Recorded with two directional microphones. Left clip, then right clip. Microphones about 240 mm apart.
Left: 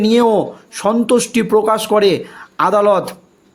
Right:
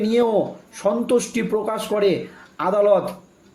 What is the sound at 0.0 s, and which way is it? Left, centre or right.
A man's voice, left.